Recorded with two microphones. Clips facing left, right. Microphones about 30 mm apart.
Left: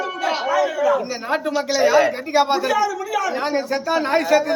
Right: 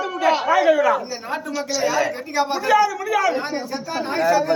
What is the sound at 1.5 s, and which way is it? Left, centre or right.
Speech, left.